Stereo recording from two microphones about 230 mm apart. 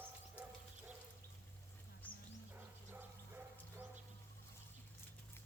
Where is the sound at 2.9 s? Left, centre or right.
Centre.